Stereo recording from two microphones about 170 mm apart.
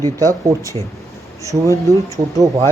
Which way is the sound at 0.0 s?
20° right (ahead or behind).